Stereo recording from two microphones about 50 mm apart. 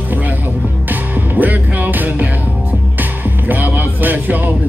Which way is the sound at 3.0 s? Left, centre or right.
Right.